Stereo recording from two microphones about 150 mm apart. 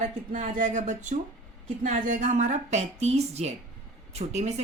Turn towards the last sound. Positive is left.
turn(degrees=-50)  # may be behind; listen again after turning